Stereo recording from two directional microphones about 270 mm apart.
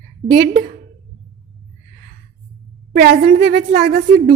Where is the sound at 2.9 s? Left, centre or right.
Right.